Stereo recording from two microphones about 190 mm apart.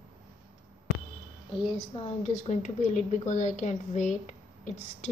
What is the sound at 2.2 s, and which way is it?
A woman's voice, 40° left (ahead or behind).